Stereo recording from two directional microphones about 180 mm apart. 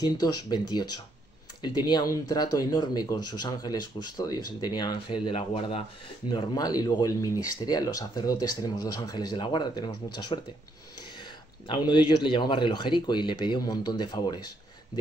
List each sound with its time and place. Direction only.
0.0 s speech: 20° left (ahead or behind)